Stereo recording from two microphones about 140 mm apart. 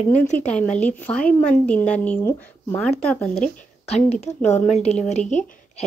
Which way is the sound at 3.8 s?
50° left (ahead or behind).